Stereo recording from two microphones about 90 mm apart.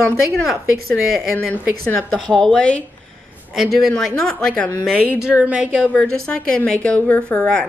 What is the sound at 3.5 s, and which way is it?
Speech, 5° right (ahead or behind).